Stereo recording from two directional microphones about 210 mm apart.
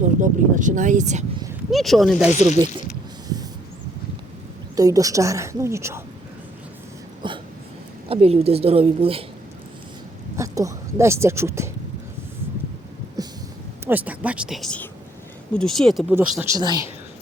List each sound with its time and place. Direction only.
0.0 s speech: 35° right (ahead or behind)
1.7 s speech: centre (ahead or behind)
4.8 s a woman's voice: 15° right (ahead or behind)
7.2 s a sound: 20° right (ahead or behind)
8.0 s a woman's voice: 30° right (ahead or behind)
10.3 s a woman's voice: 15° right (ahead or behind)
13.2 s a sound: 15° right (ahead or behind)
13.8 s a woman's voice: 10° right (ahead or behind)